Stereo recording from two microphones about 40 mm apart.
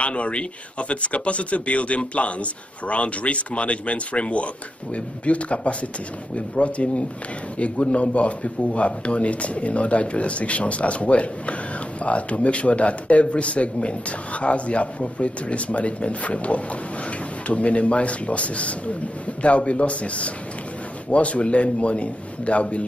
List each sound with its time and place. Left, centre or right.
0.0 s a man's voice: left